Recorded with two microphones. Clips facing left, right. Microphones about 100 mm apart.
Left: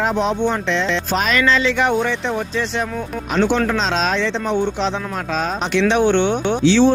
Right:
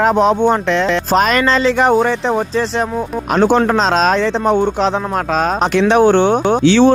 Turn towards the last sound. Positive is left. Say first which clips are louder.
# right 3 dB
turn(degrees=-60)  # may be behind; listen again after turning